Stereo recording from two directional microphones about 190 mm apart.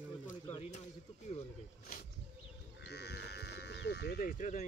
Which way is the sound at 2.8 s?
60° left (ahead or behind).